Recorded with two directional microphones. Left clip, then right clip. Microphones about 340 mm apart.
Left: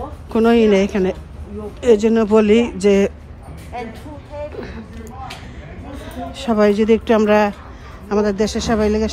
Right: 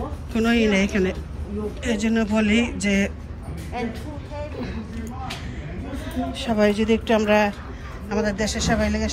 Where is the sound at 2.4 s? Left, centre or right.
Centre.